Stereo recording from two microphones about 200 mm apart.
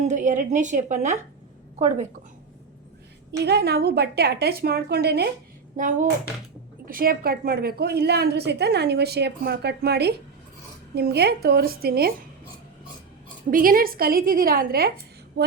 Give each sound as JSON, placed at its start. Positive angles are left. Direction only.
{"t": 0.0, "sound": "a woman's voice", "side_deg": -40}
{"t": 3.3, "sound": "a woman's voice", "side_deg": -55}
{"t": 5.7, "sound": "a woman's voice", "side_deg": -40}
{"t": 13.5, "sound": "a woman's voice", "side_deg": -45}
{"t": 15.3, "sound": "a sound", "side_deg": -55}